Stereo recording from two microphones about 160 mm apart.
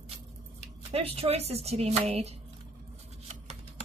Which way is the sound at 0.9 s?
40° right (ahead or behind).